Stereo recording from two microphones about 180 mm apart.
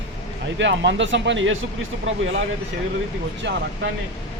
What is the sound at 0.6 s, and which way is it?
Speech, 90° right.